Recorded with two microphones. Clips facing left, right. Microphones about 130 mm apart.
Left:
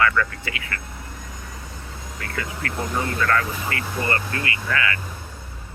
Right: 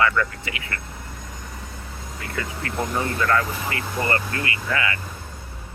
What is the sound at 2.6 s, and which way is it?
Speech, 25° right (ahead or behind).